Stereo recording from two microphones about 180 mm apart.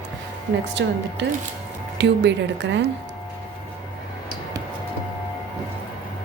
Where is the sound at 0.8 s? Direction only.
80° right.